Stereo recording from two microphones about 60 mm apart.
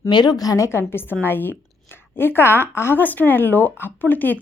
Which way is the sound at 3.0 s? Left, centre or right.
Left.